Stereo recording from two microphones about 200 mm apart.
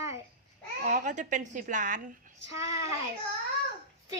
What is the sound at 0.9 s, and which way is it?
A woman's voice, 40° right (ahead or behind).